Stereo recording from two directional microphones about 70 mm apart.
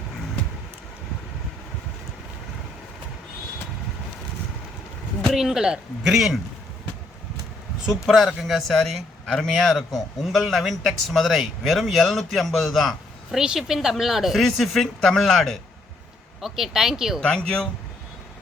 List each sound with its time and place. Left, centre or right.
5.3 s a man's voice: centre
7.9 s a man's voice: centre
17.2 s speech: centre